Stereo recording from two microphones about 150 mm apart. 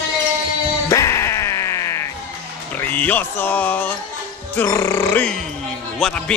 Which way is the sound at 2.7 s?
10° left (ahead or behind).